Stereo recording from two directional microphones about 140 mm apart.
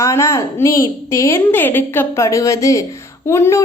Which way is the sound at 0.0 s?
20° left (ahead or behind).